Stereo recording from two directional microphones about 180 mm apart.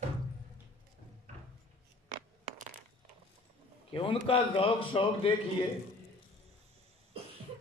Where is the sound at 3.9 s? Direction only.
30° left (ahead or behind).